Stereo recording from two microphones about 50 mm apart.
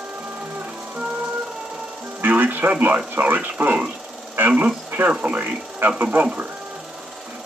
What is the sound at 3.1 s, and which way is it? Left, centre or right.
Speech, right.